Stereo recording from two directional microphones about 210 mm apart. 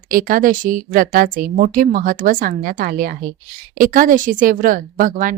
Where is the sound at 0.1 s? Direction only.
40° right (ahead or behind).